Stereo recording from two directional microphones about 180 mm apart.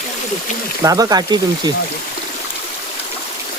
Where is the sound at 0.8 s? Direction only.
20° right (ahead or behind).